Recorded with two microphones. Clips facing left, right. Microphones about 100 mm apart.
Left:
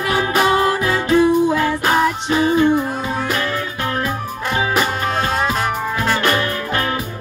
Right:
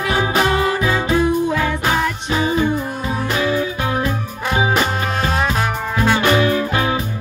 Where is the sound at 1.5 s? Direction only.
5° left (ahead or behind).